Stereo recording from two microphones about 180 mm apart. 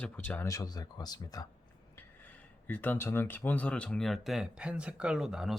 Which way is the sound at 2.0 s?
10° left (ahead or behind).